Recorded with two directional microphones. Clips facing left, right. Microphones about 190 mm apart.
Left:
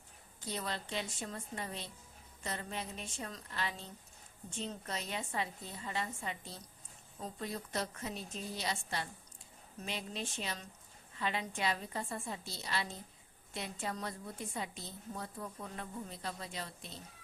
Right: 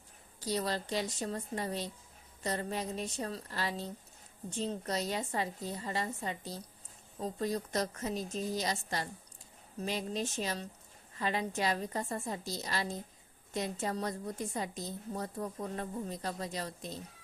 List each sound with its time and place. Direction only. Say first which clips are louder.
0.3 s a woman's voice: right 7 dB; 35° right (ahead or behind)